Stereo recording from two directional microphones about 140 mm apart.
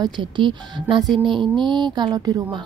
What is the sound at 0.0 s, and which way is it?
Speech, 35° right (ahead or behind).